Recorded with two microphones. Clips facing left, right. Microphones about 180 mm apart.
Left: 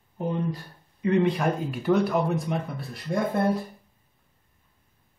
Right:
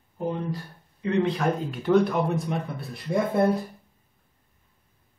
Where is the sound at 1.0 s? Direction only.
10° left (ahead or behind).